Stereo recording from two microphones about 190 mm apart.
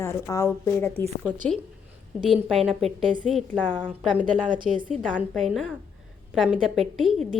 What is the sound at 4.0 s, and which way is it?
A woman's voice, centre (ahead or behind).